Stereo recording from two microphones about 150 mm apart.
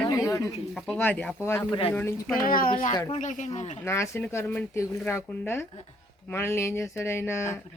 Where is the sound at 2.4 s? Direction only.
70° left (ahead or behind).